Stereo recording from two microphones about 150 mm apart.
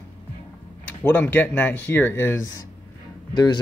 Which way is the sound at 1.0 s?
10° left (ahead or behind).